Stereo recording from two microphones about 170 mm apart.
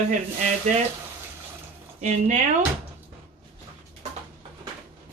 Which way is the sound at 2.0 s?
45° right (ahead or behind).